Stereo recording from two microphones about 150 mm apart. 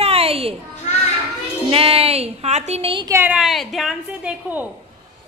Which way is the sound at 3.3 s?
Centre (ahead or behind).